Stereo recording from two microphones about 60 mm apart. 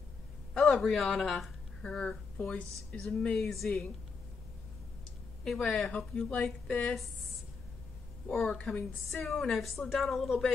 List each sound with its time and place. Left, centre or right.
0.6 s a woman's voice: centre
5.4 s a woman's voice: centre
8.3 s a woman's voice: centre
8.5 s a woman's voice: centre
9.2 s a woman's voice: centre